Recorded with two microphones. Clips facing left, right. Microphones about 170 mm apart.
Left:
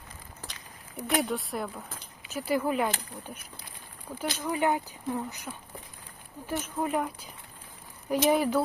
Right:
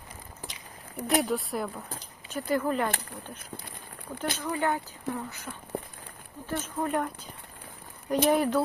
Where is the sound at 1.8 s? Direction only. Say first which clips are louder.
Right 3 dB; 35° right (ahead or behind).